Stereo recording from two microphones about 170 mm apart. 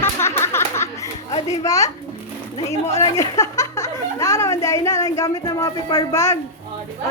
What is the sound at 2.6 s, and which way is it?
Speech, 40° left (ahead or behind).